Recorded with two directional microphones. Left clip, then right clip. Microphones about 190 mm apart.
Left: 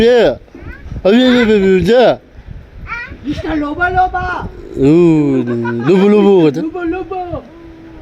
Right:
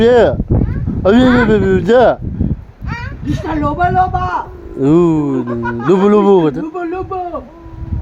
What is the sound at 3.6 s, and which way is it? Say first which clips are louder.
Speech: even; 45° right (ahead or behind).